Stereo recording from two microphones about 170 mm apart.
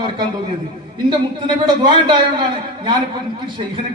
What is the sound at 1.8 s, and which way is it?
Speech, 25° right (ahead or behind).